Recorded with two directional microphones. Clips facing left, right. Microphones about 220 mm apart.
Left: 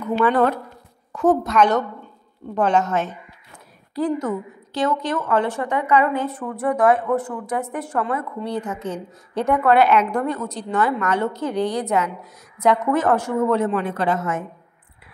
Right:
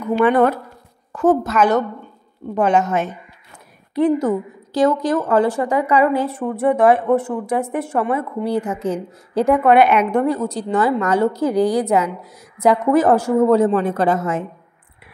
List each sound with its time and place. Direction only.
0.2 s a woman's voice: 15° right (ahead or behind)
1.1 s a woman's voice: centre (ahead or behind)
3.9 s a woman's voice: 30° right (ahead or behind)
9.7 s a woman's voice: 15° right (ahead or behind); by 14.4 s 35° right (ahead or behind)